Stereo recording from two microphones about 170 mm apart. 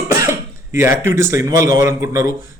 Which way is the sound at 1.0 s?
15° right (ahead or behind).